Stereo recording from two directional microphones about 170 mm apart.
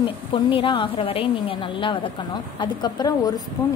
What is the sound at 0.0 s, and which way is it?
A woman's voice, 30° left (ahead or behind).